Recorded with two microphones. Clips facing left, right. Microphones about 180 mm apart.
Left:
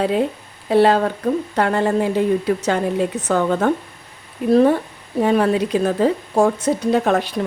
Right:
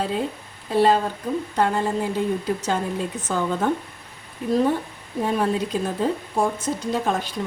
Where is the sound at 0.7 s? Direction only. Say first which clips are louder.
Left 4 dB; 70° left (ahead or behind).